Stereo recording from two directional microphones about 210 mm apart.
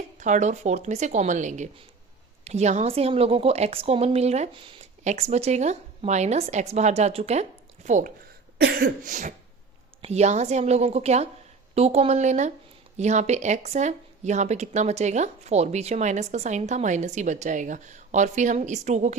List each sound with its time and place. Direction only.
0.2 s speech: 35° right (ahead or behind)
8.5 s cough: 50° right (ahead or behind)
10.0 s speech: 30° right (ahead or behind)